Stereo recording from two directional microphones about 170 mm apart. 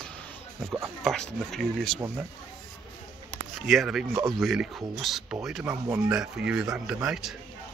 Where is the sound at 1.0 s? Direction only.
5° left (ahead or behind).